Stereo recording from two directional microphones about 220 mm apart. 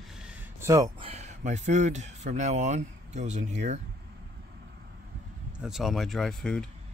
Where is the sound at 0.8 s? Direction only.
25° right (ahead or behind).